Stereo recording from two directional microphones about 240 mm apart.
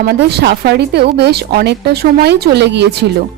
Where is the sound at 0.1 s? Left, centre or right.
Right.